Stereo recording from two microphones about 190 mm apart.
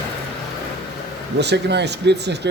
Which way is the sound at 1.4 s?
60° right (ahead or behind).